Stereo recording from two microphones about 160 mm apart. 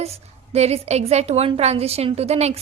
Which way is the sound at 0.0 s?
40° right (ahead or behind).